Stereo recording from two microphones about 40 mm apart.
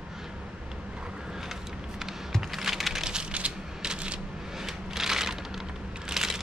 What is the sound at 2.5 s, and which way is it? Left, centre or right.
Typing, centre.